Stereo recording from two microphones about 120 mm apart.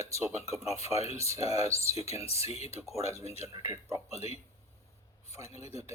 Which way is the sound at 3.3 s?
60° left (ahead or behind).